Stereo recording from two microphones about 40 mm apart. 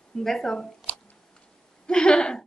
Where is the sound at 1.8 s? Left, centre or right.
Left.